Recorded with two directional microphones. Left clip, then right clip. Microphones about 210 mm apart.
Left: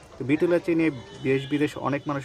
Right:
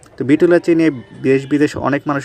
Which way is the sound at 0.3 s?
20° right (ahead or behind).